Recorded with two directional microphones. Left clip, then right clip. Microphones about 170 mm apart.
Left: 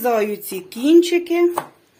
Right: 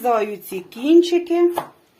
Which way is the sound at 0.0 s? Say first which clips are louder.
Even; 40° left (ahead or behind).